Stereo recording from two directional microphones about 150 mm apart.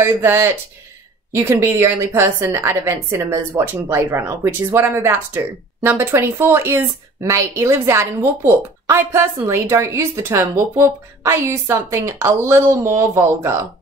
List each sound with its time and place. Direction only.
0.0 s a woman's voice: 15° right (ahead or behind)